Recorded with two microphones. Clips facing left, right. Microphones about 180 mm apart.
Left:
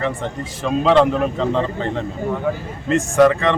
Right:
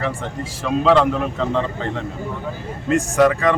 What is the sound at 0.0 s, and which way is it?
Speech, centre (ahead or behind).